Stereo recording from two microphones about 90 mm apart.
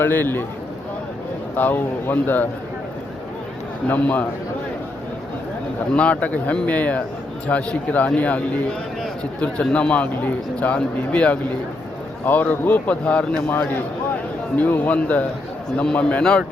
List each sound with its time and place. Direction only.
0.0 s a man's voice: 20° left (ahead or behind)
1.5 s a man's voice: 20° left (ahead or behind)
3.8 s a man's voice: 15° left (ahead or behind)
5.9 s a man's voice: 15° left (ahead or behind)